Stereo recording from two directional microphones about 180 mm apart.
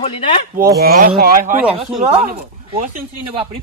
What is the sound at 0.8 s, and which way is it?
Speech, 55° right (ahead or behind).